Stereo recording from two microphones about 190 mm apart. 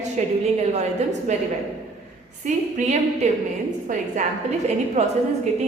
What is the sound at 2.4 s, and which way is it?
A woman's voice, 35° right (ahead or behind).